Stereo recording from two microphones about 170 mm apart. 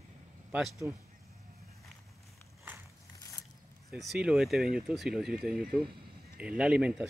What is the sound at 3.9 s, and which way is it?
Speech, centre (ahead or behind).